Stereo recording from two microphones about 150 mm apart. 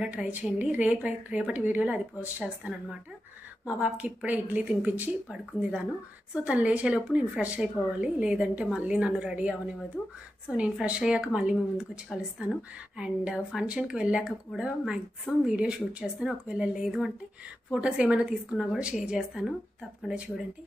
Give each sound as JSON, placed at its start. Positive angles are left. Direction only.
{"t": 0.0, "sound": "a woman's voice", "side_deg": -10}